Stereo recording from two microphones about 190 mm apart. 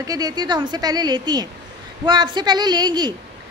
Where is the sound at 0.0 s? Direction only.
20° right (ahead or behind).